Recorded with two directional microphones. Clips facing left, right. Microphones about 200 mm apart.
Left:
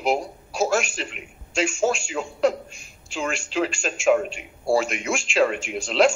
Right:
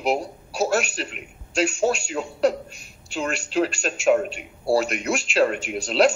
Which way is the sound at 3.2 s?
40° right (ahead or behind).